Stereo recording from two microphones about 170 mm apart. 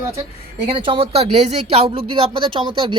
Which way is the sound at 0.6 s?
35° right (ahead or behind).